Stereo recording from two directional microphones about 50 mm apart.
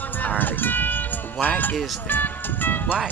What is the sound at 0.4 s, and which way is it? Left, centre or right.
Music, left.